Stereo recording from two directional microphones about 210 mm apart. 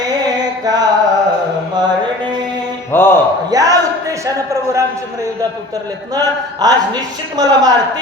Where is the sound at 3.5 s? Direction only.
15° right (ahead or behind).